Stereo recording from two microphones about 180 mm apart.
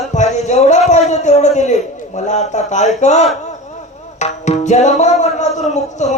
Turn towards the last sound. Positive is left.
turn(degrees=40)  # may be behind; listen again after turning